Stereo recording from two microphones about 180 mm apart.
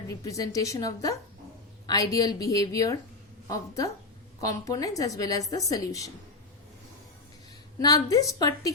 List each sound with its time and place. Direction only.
0.1 s a woman's voice: 20° left (ahead or behind)
7.8 s a woman's voice: 20° left (ahead or behind)